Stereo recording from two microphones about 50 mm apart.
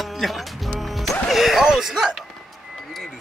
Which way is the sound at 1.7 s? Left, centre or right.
Centre.